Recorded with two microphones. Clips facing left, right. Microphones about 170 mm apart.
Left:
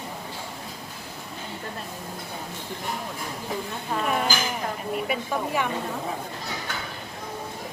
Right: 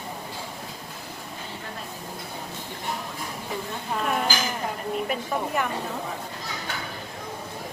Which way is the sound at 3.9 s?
Centre (ahead or behind).